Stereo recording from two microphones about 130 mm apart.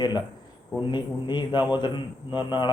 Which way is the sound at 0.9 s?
35° left (ahead or behind).